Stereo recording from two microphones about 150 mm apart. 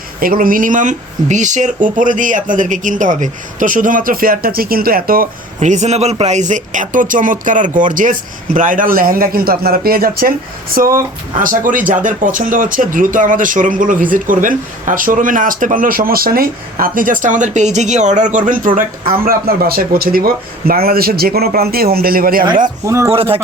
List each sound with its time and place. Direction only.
0.2 s speech: 70° right (ahead or behind)
5.5 s speech: 50° right (ahead or behind); by 10.9 s 75° right (ahead or behind)
11.3 s speech: 60° right (ahead or behind)
23.0 s a man's voice: 40° right (ahead or behind)